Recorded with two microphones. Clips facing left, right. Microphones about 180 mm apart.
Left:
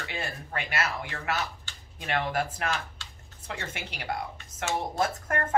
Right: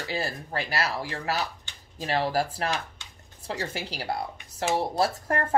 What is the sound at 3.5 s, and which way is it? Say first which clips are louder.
Speech: right 5 dB; 35° right (ahead or behind).